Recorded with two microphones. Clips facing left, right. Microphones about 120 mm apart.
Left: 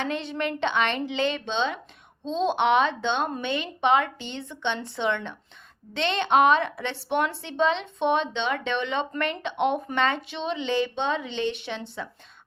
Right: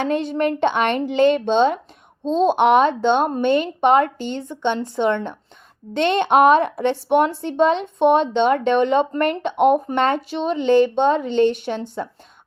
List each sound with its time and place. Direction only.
0.0 s a woman's voice: 45° right (ahead or behind)